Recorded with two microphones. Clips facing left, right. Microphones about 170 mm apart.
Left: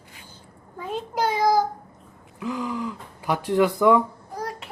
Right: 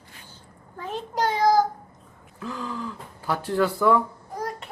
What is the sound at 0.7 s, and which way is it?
Speech, 10° left (ahead or behind).